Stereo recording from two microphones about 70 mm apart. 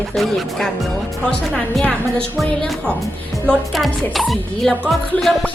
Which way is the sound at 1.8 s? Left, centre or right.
Centre.